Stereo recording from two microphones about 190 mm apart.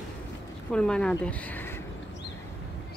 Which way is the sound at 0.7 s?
5° left (ahead or behind).